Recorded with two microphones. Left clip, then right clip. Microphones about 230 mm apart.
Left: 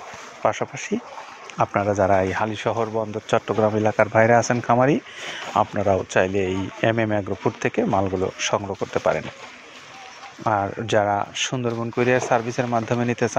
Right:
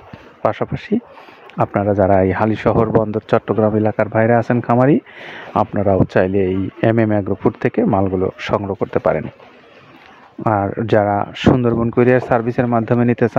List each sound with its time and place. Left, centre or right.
0.4 s speech: right
10.4 s speech: right